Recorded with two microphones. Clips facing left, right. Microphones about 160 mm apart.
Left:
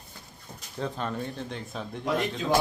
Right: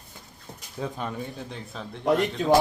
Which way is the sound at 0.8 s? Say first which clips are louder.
Even; 10° right (ahead or behind).